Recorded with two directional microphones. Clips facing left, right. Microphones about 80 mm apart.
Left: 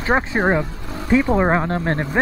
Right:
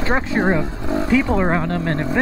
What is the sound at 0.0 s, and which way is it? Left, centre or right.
Speech, left.